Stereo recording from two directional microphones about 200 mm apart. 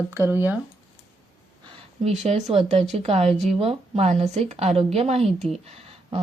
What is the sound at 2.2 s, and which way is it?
A woman's voice, 30° right (ahead or behind).